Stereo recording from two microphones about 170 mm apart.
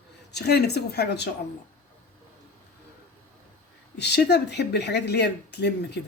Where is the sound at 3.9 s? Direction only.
80° left.